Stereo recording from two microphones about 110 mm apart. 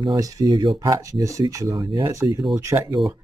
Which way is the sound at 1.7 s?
50° right (ahead or behind).